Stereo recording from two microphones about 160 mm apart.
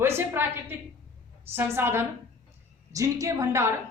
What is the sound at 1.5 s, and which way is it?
A woman's voice, 15° right (ahead or behind).